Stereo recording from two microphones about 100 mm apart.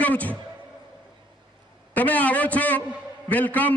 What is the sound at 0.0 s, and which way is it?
Speech, 15° left (ahead or behind).